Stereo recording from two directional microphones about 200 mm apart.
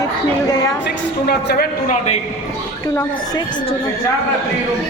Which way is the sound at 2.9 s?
15° left (ahead or behind).